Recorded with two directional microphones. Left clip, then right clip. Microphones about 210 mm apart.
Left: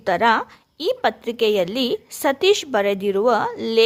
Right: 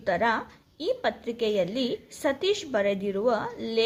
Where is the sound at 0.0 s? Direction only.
40° left (ahead or behind).